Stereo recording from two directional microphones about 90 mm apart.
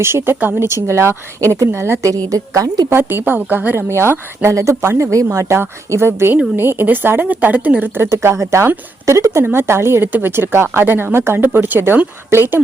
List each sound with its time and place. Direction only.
0.0 s speech: 30° right (ahead or behind)
3.0 s speech: 25° right (ahead or behind)